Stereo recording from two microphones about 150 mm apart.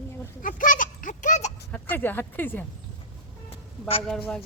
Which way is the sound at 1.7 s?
10° left (ahead or behind).